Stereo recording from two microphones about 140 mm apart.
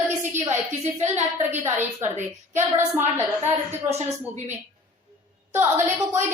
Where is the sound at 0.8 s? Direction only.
55° right (ahead or behind).